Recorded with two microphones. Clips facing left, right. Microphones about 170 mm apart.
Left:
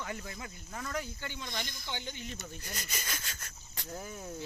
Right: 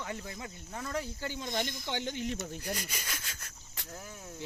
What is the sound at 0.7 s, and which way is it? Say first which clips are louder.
Speech: right 2 dB; 30° right (ahead or behind).